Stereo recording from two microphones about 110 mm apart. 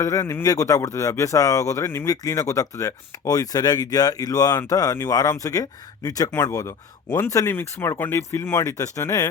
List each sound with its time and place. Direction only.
0.0 s speech: 30° left (ahead or behind)